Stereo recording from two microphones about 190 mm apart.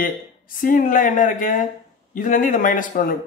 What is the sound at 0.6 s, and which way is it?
Speech, 45° left (ahead or behind).